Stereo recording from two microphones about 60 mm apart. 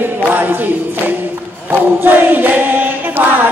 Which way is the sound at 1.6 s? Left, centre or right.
Right.